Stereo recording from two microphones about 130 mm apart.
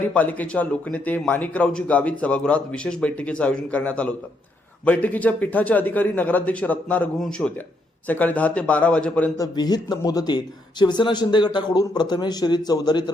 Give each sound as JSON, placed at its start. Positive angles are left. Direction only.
{"t": 0.1, "sound": "speech", "side_deg": 10}
{"t": 9.4, "sound": "speech", "side_deg": 30}